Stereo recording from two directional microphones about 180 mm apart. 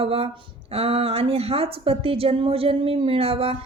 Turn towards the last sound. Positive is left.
turn(degrees=-30)  # may be behind; listen again after turning